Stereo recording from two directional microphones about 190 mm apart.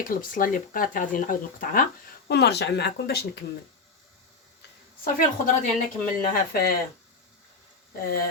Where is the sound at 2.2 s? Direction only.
60° left (ahead or behind).